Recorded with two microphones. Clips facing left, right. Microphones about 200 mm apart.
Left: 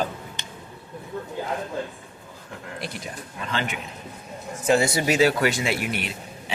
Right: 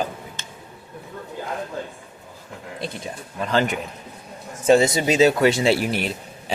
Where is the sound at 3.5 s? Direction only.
40° right (ahead or behind).